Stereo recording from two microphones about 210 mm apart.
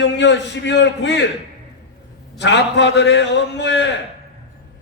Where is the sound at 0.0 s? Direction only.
55° left (ahead or behind).